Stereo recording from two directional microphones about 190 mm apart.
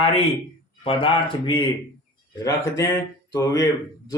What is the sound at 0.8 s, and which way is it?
Speech, 30° left (ahead or behind).